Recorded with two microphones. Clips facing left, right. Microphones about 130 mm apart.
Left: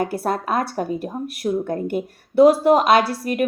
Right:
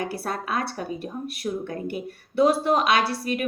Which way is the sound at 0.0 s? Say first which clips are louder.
Left 7 dB; 45° left (ahead or behind).